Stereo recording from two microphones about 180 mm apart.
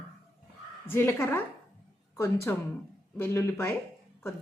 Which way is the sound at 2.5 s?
15° left (ahead or behind).